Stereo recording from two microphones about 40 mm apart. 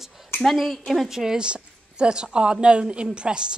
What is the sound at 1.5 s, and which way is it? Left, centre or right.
A woman's voice, right.